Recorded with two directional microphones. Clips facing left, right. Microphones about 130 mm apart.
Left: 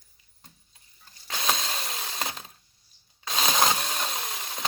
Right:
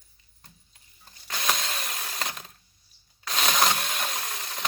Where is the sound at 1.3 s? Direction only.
25° left (ahead or behind).